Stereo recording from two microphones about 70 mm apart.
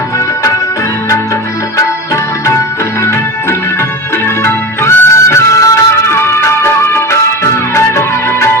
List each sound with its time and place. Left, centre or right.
4.4 s music: left
6.1 s music: left